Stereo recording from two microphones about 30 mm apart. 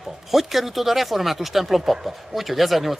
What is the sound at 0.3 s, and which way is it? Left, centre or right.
Speech, centre.